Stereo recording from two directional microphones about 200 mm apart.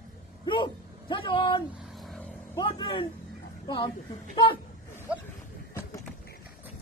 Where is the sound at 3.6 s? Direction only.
25° left (ahead or behind).